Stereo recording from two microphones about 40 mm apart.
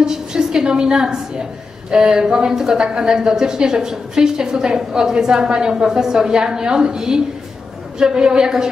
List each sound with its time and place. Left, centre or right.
0.0 s a woman's voice: centre